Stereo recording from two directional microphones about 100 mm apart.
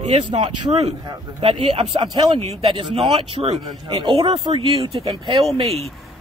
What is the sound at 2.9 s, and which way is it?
Speech, 60° right (ahead or behind).